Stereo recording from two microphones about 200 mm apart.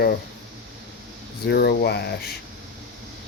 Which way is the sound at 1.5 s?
55° left (ahead or behind).